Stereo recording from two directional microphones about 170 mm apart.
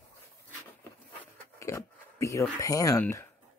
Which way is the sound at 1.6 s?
15° left (ahead or behind).